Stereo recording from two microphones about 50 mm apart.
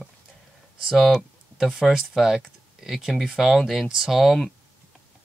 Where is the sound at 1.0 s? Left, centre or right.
Centre.